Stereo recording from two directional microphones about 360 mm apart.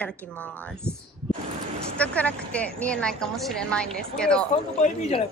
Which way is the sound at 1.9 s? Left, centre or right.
Centre.